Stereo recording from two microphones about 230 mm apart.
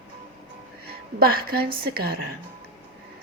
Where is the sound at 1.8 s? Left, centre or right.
Right.